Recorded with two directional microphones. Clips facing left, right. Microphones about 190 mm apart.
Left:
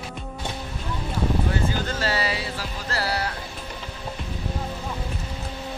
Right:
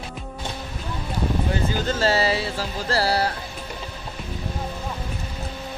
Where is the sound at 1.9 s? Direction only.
25° right (ahead or behind).